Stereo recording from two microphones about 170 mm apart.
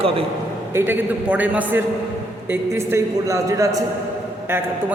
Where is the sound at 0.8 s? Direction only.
10° right (ahead or behind).